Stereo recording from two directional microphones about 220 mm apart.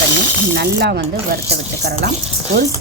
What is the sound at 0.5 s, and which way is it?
Speech, 45° right (ahead or behind).